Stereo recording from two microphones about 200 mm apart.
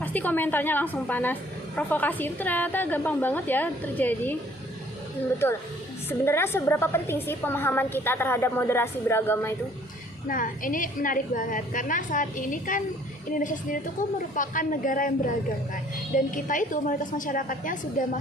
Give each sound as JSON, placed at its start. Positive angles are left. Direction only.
{"t": 0.0, "sound": "a woman's voice", "side_deg": 10}
{"t": 6.1, "sound": "a woman's voice", "side_deg": 10}
{"t": 10.2, "sound": "a woman's voice", "side_deg": 40}